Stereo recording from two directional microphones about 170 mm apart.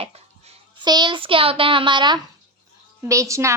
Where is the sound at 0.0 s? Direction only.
35° right (ahead or behind).